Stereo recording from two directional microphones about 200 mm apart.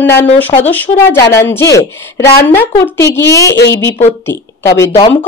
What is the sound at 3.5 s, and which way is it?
Speech, 60° left (ahead or behind).